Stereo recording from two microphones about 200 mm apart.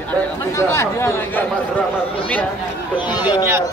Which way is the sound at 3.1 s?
20° left (ahead or behind).